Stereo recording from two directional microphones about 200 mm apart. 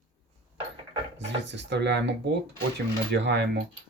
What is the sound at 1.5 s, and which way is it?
Speech, 60° right (ahead or behind).